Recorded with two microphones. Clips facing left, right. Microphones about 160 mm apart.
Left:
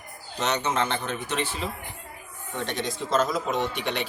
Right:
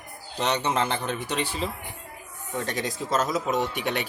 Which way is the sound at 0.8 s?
Centre (ahead or behind).